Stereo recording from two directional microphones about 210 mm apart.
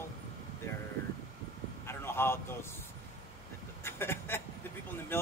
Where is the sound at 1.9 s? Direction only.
10° left (ahead or behind).